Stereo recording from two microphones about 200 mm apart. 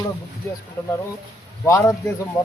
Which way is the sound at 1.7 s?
15° left (ahead or behind).